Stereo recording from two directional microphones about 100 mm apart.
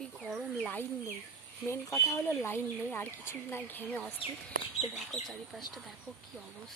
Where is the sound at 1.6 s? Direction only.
30° left (ahead or behind).